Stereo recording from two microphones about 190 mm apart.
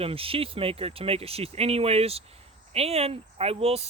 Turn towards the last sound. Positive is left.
turn(degrees=-30)  # may be behind; listen again after turning